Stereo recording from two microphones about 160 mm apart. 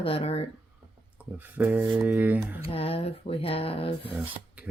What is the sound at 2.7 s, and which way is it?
Speech, 35° left (ahead or behind).